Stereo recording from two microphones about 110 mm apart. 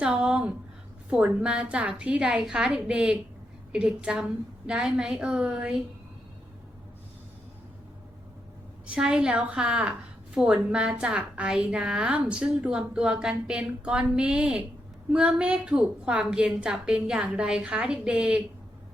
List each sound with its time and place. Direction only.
0.0 s a woman's voice: 10° right (ahead or behind)
8.9 s a woman's voice: 5° right (ahead or behind)